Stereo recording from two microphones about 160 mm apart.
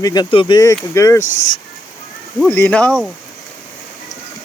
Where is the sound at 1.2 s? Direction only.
50° left (ahead or behind).